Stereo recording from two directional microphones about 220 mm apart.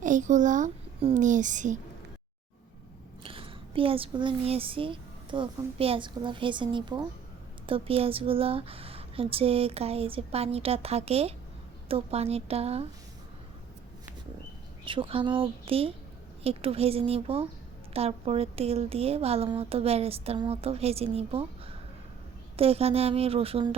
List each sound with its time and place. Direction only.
0.0 s a child's voice: 35° right (ahead or behind)
3.2 s a woman's voice: 25° right (ahead or behind)
14.8 s a woman's voice: 25° right (ahead or behind)